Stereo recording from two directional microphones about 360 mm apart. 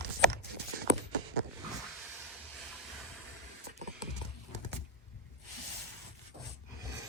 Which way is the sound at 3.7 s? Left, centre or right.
Centre.